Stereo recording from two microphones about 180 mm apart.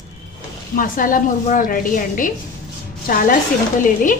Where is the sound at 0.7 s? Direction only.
50° left (ahead or behind).